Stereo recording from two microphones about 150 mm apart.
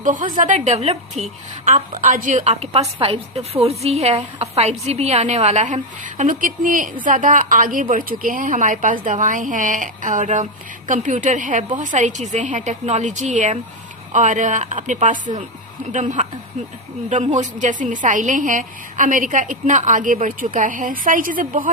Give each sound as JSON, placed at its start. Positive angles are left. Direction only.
{"t": 0.0, "sound": "a woman's voice", "side_deg": -60}